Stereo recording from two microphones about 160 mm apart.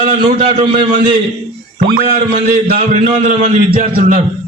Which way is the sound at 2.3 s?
65° right (ahead or behind).